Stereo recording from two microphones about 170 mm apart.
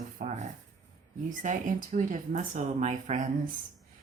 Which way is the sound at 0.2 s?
50° right (ahead or behind).